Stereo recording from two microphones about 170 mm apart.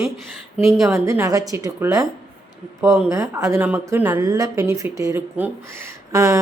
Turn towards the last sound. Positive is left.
turn(degrees=-20)  # may be behind; listen again after turning